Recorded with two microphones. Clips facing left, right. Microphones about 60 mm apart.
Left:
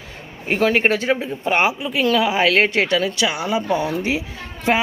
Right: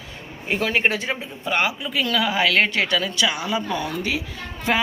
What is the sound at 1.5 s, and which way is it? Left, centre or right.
A woman's voice, left.